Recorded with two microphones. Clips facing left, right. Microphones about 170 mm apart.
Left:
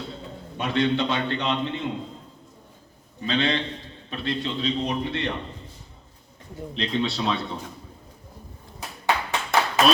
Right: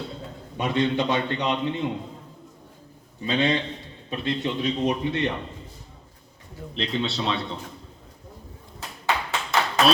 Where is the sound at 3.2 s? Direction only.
15° right (ahead or behind).